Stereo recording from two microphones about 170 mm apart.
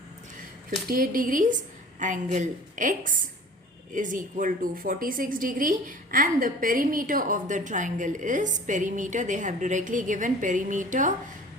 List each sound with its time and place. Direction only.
0.9 s a woman's voice: 55° right (ahead or behind)